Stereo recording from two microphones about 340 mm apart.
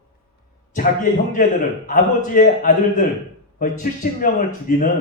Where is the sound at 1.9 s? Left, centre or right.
Left.